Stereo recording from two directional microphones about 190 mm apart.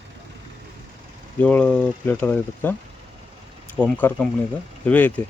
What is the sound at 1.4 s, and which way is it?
Speech, 5° left (ahead or behind).